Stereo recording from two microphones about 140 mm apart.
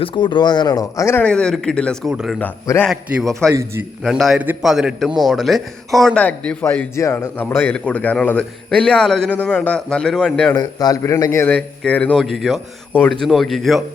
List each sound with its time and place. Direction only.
0.0 s speech: 35° left (ahead or behind)
1.2 s a man's voice: 5° left (ahead or behind)
2.4 s a man's voice: 15° left (ahead or behind)
2.8 s a man's voice: centre (ahead or behind)
3.4 s a man's voice: 20° right (ahead or behind)
4.0 s a man's voice: centre (ahead or behind)
6.7 s a man's voice: 20° left (ahead or behind)
10.5 s a man's voice: 30° left (ahead or behind); by 12.2 s 10° left (ahead or behind)
12.2 s a man's voice: centre (ahead or behind)